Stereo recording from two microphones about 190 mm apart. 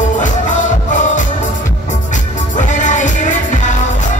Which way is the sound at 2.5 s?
40° left (ahead or behind).